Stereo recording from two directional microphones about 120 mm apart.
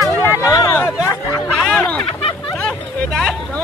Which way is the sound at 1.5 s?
Centre (ahead or behind).